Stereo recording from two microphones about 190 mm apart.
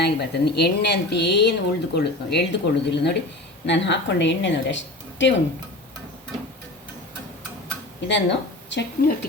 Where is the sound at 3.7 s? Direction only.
70° left (ahead or behind).